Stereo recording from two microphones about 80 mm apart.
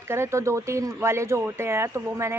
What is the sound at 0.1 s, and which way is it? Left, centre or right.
A woman's voice, right.